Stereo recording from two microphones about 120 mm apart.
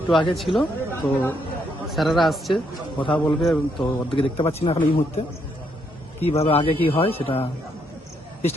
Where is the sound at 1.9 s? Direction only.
Centre (ahead or behind).